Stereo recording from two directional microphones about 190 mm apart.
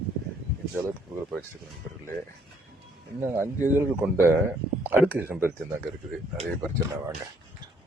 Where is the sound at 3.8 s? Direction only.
10° right (ahead or behind).